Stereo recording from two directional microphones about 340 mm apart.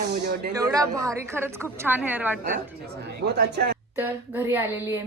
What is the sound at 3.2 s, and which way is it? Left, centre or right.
Speech, right.